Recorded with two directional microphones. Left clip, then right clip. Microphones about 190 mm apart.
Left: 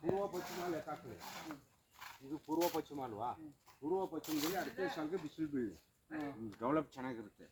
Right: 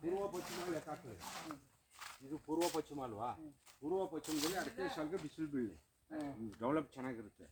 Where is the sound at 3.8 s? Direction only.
Centre (ahead or behind).